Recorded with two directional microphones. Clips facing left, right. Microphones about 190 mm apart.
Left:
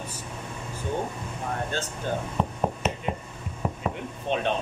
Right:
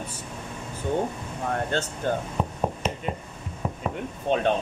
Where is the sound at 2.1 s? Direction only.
55° right (ahead or behind).